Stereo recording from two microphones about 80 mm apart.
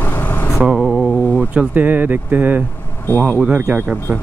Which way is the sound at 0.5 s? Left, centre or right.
Centre.